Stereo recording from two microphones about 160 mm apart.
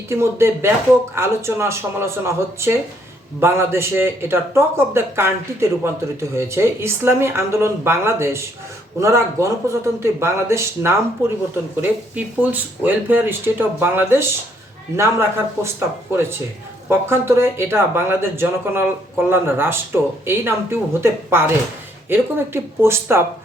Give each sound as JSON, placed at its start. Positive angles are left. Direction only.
{"t": 0.1, "sound": "a man's voice", "side_deg": -15}
{"t": 17.1, "sound": "a man's voice", "side_deg": -15}